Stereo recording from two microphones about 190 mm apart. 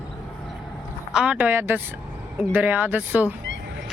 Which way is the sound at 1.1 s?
5° right (ahead or behind).